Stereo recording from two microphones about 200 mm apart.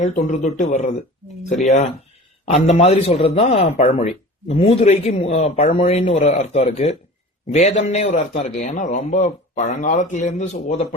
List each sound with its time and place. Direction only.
0.0 s a man's voice: 35° left (ahead or behind)